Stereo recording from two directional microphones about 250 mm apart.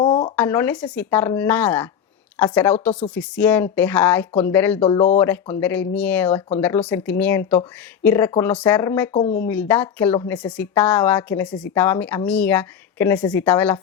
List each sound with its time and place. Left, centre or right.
0.0 s a sound: centre
0.3 s a woman's voice: centre
4.8 s speech: left
5.2 s a woman's voice: centre